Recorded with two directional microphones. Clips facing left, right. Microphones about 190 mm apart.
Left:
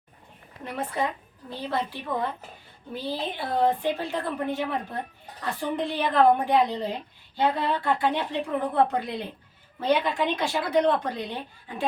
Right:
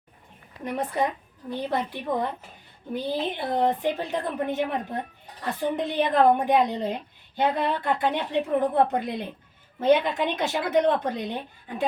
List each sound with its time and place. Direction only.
1.5 s speech: 15° right (ahead or behind)